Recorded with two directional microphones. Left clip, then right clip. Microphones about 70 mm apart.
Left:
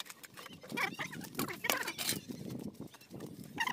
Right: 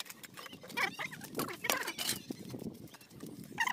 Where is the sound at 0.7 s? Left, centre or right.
Centre.